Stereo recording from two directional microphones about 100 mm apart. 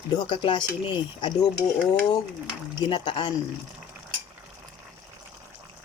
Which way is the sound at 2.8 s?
55° left (ahead or behind).